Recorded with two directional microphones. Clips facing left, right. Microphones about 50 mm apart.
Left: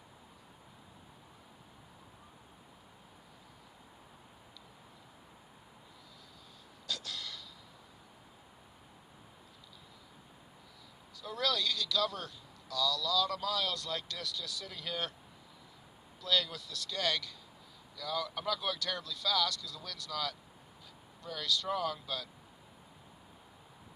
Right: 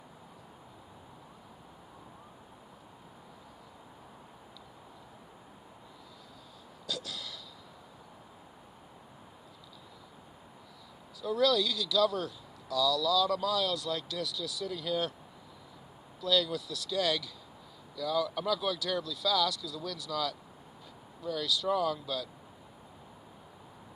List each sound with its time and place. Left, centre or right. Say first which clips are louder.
6.8 s a sound: right 2 dB; centre
11.2 s speech: right 7 dB; centre
16.2 s speech: right 4 dB; centre